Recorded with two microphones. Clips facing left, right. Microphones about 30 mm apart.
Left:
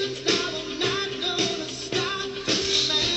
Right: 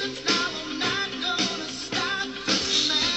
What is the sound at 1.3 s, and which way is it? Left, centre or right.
Music, right.